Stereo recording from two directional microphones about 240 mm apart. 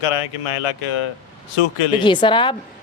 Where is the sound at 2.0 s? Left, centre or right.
Centre.